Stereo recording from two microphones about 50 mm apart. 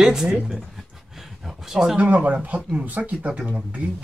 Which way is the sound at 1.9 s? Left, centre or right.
Right.